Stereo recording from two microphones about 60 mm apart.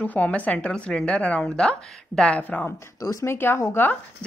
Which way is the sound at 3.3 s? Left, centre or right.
Left.